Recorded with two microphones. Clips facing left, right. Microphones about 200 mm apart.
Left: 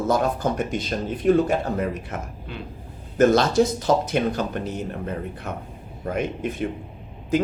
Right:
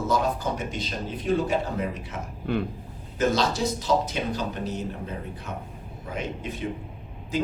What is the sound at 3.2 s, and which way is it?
Speech, 55° left (ahead or behind).